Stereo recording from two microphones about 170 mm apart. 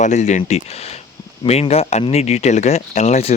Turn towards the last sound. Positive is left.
turn(degrees=40)  # may be behind; listen again after turning